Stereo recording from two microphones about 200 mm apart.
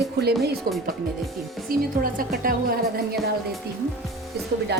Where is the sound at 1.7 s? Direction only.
45° right (ahead or behind).